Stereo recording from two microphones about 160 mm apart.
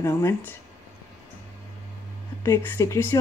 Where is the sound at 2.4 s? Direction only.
15° left (ahead or behind).